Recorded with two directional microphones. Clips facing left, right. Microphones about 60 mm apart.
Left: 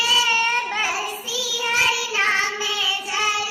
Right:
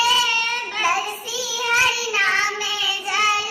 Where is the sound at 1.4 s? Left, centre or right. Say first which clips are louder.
Right 2 dB; right.